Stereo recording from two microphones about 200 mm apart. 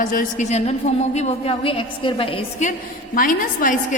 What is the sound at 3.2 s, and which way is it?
Speech, 45° left (ahead or behind).